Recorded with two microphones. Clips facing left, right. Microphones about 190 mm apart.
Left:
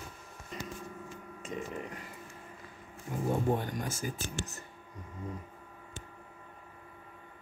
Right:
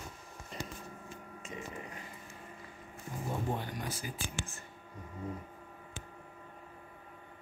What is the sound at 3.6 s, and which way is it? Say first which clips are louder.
Speech: left 4 dB; 45° left (ahead or behind).